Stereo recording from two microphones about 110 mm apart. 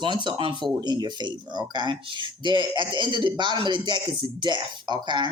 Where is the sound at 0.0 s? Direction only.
45° right (ahead or behind).